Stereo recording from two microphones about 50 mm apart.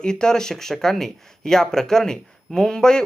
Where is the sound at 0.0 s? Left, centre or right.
Centre.